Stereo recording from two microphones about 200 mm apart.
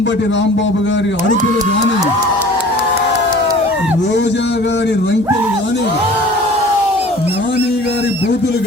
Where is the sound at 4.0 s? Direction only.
60° left (ahead or behind).